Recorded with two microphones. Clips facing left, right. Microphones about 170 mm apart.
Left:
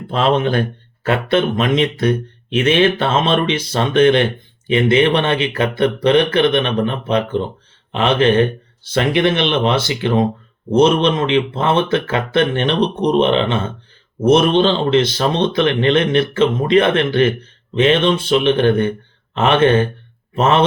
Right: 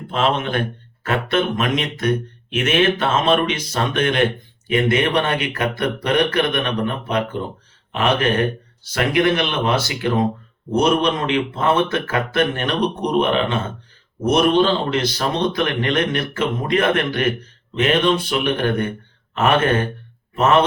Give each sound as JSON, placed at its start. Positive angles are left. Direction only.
{"t": 0.1, "sound": "a man's voice", "side_deg": 35}